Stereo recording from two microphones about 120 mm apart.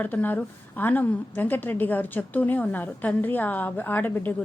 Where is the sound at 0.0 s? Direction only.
15° left (ahead or behind).